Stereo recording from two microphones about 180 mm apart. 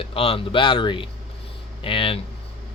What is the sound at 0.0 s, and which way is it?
Speech, 30° left (ahead or behind).